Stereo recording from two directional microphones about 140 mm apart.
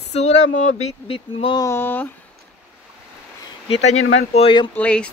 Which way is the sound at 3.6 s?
45° left (ahead or behind).